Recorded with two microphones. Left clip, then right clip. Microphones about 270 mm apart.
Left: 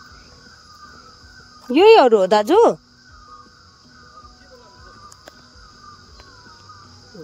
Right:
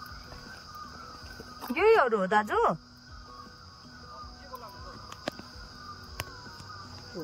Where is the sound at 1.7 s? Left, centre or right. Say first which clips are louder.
Left 13 dB; left.